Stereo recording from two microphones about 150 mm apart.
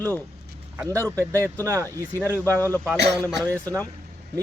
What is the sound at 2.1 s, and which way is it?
A man's voice, 15° left (ahead or behind).